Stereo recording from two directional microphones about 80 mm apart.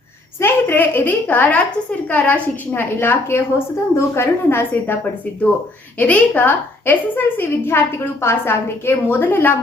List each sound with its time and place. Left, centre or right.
0.3 s a woman's voice: left
6.0 s a woman's voice: left